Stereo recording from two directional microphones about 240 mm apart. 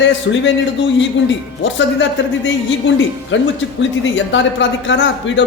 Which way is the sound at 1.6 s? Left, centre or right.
Left.